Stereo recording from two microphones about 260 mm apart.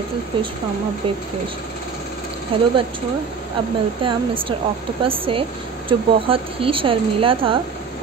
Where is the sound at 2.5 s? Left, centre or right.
Right.